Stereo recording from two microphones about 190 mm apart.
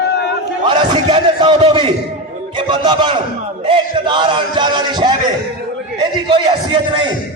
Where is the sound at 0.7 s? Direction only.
25° right (ahead or behind).